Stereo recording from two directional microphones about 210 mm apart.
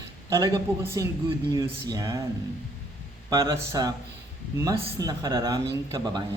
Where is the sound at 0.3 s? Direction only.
15° right (ahead or behind).